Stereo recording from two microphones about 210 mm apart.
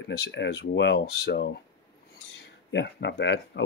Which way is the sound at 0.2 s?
55° left (ahead or behind).